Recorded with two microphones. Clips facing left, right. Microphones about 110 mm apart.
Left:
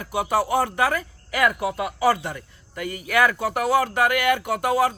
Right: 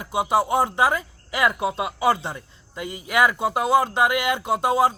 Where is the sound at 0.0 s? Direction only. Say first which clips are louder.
Right 1 dB; 20° right (ahead or behind).